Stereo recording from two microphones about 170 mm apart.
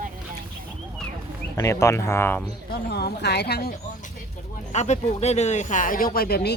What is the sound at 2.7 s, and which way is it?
Speech, 65° left (ahead or behind).